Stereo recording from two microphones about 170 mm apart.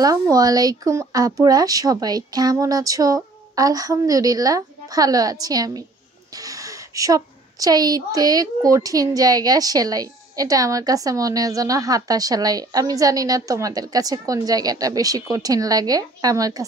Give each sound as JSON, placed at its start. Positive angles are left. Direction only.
{"t": 0.0, "sound": "a woman's voice", "side_deg": -20}